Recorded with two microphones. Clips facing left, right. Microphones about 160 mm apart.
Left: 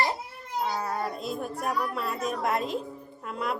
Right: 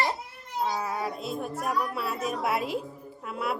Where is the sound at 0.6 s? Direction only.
10° right (ahead or behind).